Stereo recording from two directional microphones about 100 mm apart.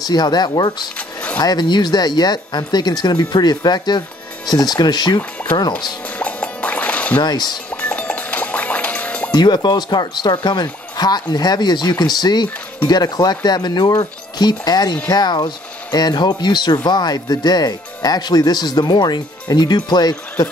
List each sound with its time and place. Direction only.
0.0 s speech: 45° left (ahead or behind)
0.9 s a sound: 15° left (ahead or behind)
1.4 s speech: 45° left (ahead or behind)
6.0 s plop: 15° left (ahead or behind)
7.2 s speech: 45° left (ahead or behind)
7.7 s music: 10° left (ahead or behind)
9.3 s speech: 45° left (ahead or behind)